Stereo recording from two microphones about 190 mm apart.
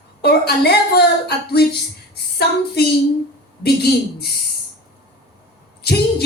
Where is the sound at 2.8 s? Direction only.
55° left (ahead or behind).